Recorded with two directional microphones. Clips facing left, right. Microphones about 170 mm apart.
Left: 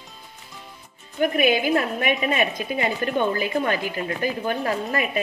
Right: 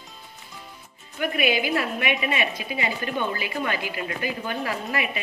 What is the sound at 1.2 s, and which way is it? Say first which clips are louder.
A woman's voice: left 4 dB; 45° left (ahead or behind).